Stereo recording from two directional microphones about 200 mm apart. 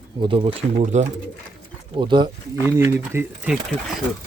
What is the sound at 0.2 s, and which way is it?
Speech, 25° right (ahead or behind).